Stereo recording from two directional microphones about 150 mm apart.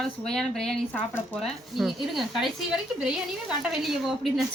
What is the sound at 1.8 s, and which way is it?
A woman's voice, centre (ahead or behind).